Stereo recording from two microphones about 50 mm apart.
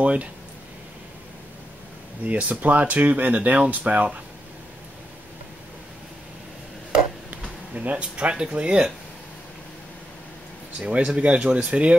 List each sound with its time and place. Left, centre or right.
0.0 s speech: right
2.2 s speech: right
7.7 s speech: right
10.8 s speech: right